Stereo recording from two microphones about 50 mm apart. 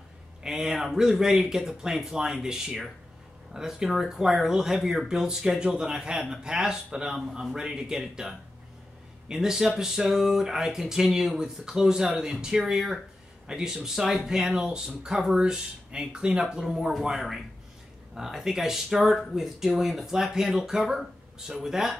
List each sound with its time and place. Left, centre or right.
0.4 s speech: centre